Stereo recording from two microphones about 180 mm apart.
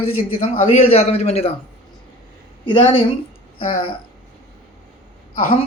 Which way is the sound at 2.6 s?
30° left (ahead or behind).